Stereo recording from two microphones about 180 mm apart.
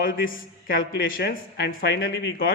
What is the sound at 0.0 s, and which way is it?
A man's voice, 55° left (ahead or behind).